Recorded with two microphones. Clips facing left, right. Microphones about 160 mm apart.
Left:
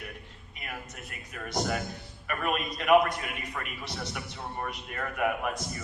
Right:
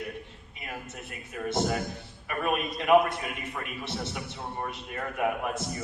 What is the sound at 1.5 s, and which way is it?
A man's voice, 25° right (ahead or behind).